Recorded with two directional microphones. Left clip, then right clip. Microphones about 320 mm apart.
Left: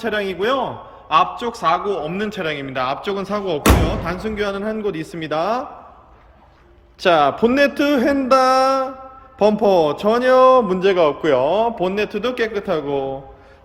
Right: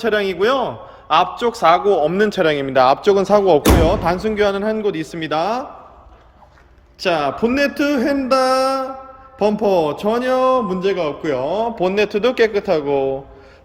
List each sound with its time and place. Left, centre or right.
0.0 s a man's voice: centre
7.0 s a man's voice: centre